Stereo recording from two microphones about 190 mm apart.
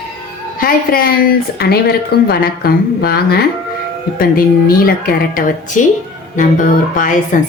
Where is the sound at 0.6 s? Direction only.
50° left (ahead or behind).